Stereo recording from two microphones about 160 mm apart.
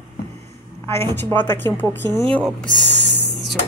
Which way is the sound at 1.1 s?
10° left (ahead or behind).